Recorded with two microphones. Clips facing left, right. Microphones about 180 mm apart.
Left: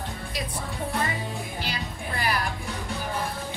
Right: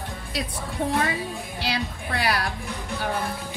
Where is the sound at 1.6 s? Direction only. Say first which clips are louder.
Right 4 dB; 85° right.